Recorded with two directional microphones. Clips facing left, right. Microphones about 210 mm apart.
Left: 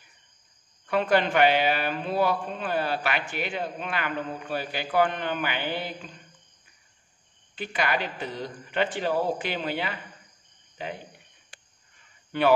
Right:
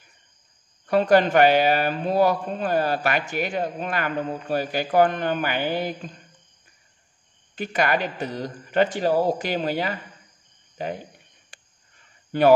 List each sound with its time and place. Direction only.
0.8 s speech: 40° right (ahead or behind)
7.5 s a man's voice: 45° right (ahead or behind)
12.3 s speech: 40° right (ahead or behind)